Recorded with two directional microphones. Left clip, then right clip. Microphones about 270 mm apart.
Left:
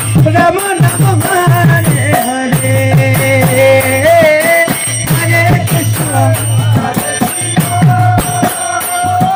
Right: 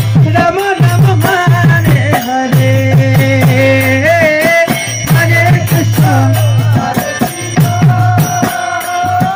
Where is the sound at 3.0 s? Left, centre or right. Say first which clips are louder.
Left 1 dB; left.